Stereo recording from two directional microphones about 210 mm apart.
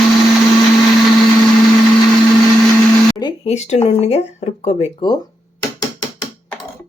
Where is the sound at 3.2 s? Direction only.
30° left (ahead or behind).